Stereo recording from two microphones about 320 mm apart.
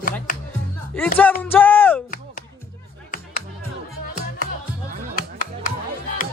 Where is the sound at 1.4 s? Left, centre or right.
Centre.